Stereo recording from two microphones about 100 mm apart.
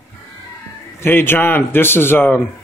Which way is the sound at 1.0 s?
20° left (ahead or behind).